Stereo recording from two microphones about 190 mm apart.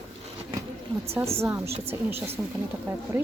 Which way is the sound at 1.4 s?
15° right (ahead or behind).